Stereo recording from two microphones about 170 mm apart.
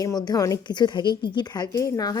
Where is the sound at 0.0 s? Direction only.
25° left (ahead or behind).